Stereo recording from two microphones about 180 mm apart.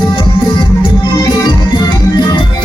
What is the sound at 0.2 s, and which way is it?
Music, 30° left (ahead or behind).